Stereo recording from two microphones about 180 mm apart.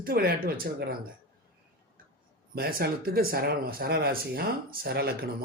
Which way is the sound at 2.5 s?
60° right (ahead or behind).